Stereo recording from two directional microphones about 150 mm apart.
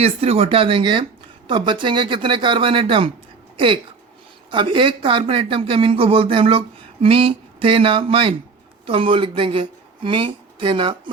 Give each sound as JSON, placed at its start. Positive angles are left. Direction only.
{"t": 0.0, "sound": "speech", "side_deg": -40}
{"t": 4.5, "sound": "speech", "side_deg": -35}